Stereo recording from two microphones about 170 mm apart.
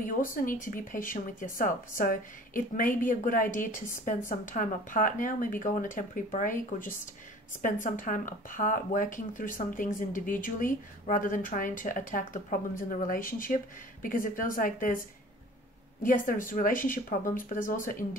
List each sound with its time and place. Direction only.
0.0 s speech: 55° left (ahead or behind)
16.0 s speech: 50° left (ahead or behind)